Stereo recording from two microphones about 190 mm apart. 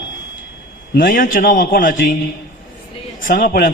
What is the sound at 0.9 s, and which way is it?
A man's voice, 45° left (ahead or behind).